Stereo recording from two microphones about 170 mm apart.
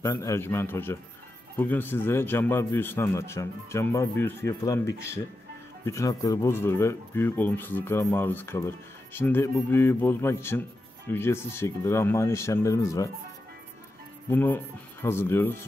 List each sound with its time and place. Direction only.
0.0 s speech: 15° left (ahead or behind)
5.9 s speech: 20° left (ahead or behind)
14.3 s speech: 10° left (ahead or behind)